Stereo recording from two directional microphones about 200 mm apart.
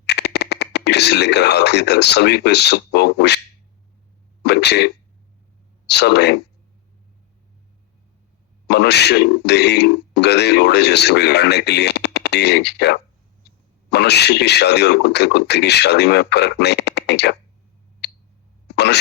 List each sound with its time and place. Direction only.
0.0 s speech: 55° left (ahead or behind)
4.4 s speech: 55° left (ahead or behind)
5.9 s speech: 55° left (ahead or behind)
8.6 s speech: 55° left (ahead or behind)
18.0 s a sound: 55° left (ahead or behind)